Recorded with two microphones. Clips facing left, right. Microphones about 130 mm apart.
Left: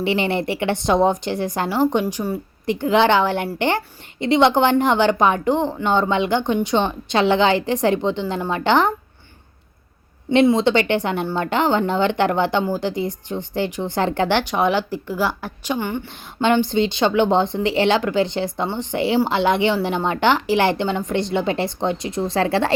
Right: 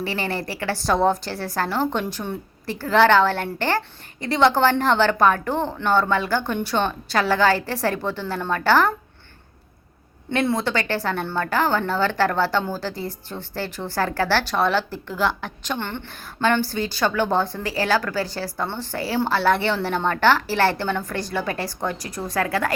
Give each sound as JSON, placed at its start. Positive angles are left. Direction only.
{"t": 0.0, "sound": "a woman's voice", "side_deg": 20}
{"t": 10.2, "sound": "a woman's voice", "side_deg": 15}